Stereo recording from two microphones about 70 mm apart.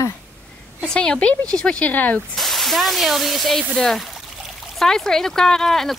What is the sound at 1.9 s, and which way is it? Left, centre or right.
Speech, left.